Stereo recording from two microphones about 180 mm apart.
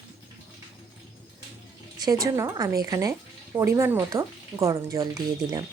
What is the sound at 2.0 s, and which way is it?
A woman's voice, 20° right (ahead or behind).